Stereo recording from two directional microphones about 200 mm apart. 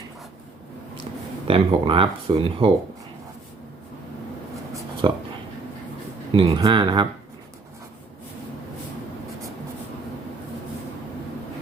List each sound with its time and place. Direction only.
1.5 s speech: 25° right (ahead or behind)
5.0 s speech: 25° right (ahead or behind)
6.3 s speech: 25° right (ahead or behind)